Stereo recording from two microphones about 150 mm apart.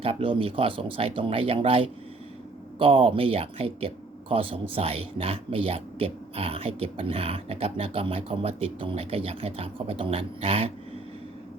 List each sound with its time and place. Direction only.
0.0 s speech: 40° right (ahead or behind)